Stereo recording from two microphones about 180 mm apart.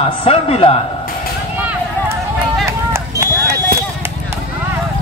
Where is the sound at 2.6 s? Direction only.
15° right (ahead or behind).